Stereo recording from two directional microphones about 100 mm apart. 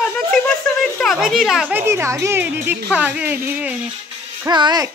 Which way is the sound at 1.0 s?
Centre (ahead or behind).